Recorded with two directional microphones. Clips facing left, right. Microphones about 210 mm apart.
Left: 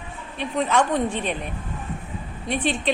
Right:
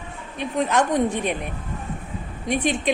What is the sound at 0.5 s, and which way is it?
A woman's voice, 10° right (ahead or behind).